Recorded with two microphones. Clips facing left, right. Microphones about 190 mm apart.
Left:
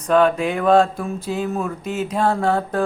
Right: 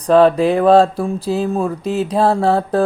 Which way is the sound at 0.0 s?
35° right (ahead or behind).